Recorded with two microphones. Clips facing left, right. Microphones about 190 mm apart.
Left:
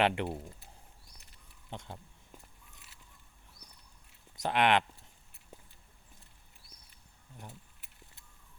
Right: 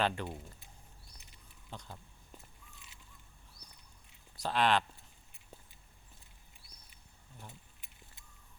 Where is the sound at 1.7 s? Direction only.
25° left (ahead or behind).